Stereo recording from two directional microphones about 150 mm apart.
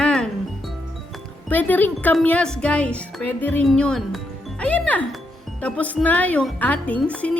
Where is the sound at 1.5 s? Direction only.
10° left (ahead or behind).